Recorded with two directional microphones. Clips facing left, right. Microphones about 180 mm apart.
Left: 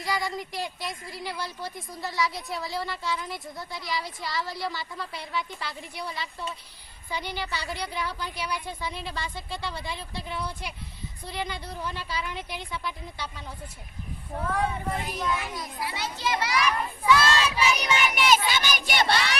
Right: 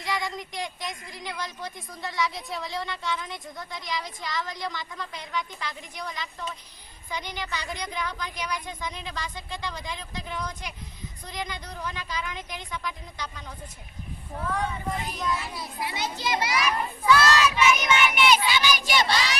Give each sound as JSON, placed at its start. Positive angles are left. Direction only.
{"t": 0.0, "sound": "a woman's voice", "side_deg": 0}
{"t": 15.8, "sound": "a child's voice", "side_deg": -20}
{"t": 17.1, "sound": "child singing", "side_deg": 30}